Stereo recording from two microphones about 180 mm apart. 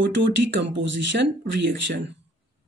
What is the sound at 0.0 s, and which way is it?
Speech, 90° right.